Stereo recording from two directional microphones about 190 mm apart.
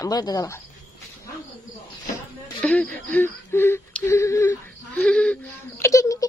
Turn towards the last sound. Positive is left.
turn(degrees=15)  # may be behind; listen again after turning